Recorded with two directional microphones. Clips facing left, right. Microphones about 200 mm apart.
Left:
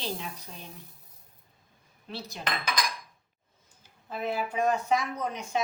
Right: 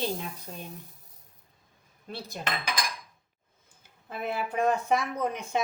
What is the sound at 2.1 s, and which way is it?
Speech, 55° right (ahead or behind).